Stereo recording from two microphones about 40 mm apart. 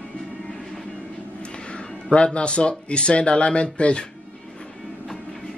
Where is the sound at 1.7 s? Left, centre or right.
Left.